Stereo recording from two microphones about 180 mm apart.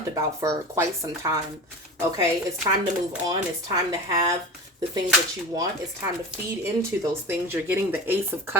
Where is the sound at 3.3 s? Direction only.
20° right (ahead or behind).